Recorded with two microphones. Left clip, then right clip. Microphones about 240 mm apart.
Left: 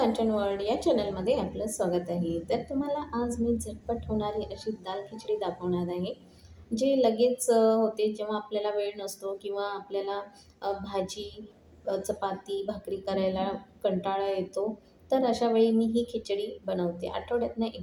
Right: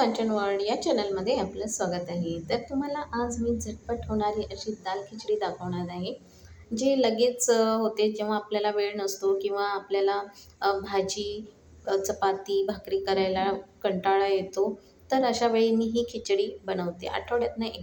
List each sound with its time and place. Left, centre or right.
0.0 s a woman's voice: right